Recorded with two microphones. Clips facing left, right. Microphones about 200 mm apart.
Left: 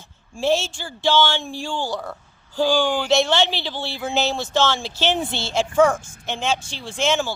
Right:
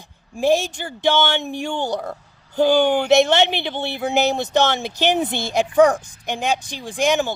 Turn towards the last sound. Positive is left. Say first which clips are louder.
# right 3 dB
turn(degrees=-15)  # may be behind; listen again after turning